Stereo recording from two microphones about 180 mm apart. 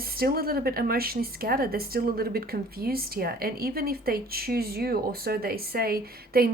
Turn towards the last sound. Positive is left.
turn(degrees=-55)  # may be behind; listen again after turning